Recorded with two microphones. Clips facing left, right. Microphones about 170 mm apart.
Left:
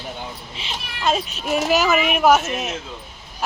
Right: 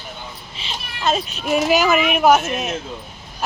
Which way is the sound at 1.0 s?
Centre (ahead or behind).